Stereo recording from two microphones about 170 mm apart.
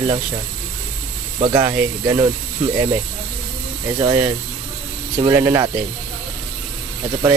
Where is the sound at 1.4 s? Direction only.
25° right (ahead or behind).